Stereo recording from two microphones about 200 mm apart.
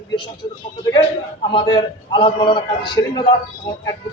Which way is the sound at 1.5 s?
25° left (ahead or behind).